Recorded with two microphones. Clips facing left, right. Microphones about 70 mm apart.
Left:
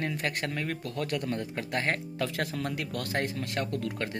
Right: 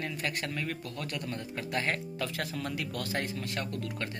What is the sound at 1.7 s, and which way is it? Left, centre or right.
Speech, left.